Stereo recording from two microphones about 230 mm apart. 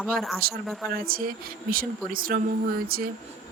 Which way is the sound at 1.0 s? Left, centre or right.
Right.